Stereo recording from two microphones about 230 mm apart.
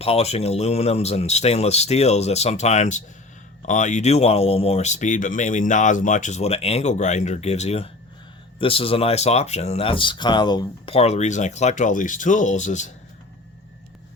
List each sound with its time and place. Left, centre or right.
0.0 s speech: left